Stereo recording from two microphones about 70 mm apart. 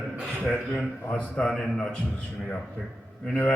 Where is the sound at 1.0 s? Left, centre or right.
Centre.